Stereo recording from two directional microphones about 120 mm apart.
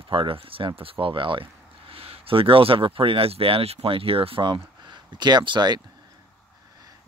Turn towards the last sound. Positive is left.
turn(degrees=-40)  # may be behind; listen again after turning